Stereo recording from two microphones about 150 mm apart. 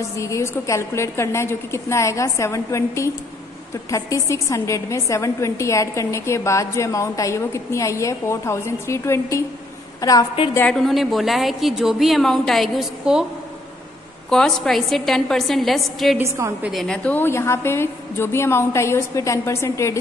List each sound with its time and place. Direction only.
0.2 s a woman's voice: 20° left (ahead or behind)
10.5 s a woman's voice: 10° left (ahead or behind)
14.3 s a woman's voice: 5° left (ahead or behind)
16.2 s a woman's voice: 20° right (ahead or behind)
16.6 s a woman's voice: centre (ahead or behind); by 20.0 s 20° left (ahead or behind)